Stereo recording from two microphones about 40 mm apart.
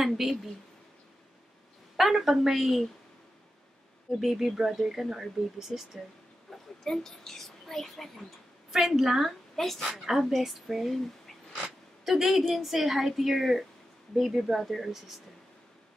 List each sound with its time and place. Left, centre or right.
0.2 s speech: centre
2.0 s speech: centre
4.2 s speech: centre
6.5 s a woman's voice: centre
8.7 s speech: centre
9.6 s a woman's voice: centre